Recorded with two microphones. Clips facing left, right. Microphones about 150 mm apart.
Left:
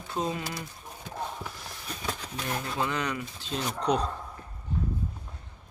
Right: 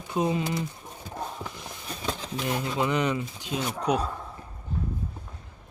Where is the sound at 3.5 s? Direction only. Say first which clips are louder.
Right 1 dB; 10° right (ahead or behind).